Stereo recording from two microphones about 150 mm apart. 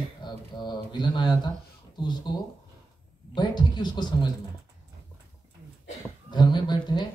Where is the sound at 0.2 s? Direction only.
30° left (ahead or behind).